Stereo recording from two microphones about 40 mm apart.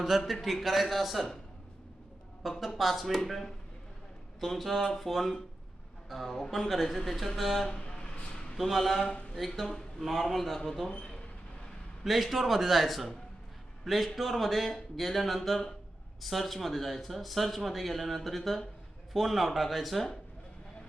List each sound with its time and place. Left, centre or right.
0.1 s speech: centre
2.4 s speech: centre
7.9 s a sound: left
8.5 s speech: centre
9.0 s speech: left
10.0 s speech: centre
12.0 s speech: centre